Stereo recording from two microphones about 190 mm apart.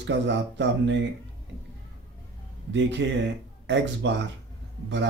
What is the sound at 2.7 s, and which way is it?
Speech, 70° right (ahead or behind).